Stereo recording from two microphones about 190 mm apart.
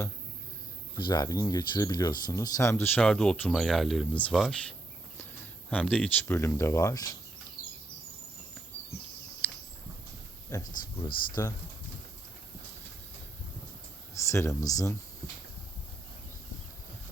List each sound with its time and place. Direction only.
0.9 s speech: 25° left (ahead or behind); by 4.5 s 5° left (ahead or behind)
5.7 s speech: 5° left (ahead or behind)
10.5 s speech: 20° left (ahead or behind)
14.1 s a sound: 15° left (ahead or behind)
14.7 s speech: 20° left (ahead or behind)